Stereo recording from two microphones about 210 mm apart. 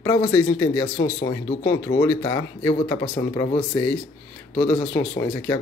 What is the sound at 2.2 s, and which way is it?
Speech, 20° left (ahead or behind).